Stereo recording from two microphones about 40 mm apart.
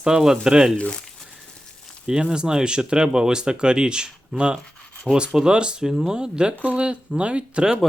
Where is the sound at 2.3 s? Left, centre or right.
Centre.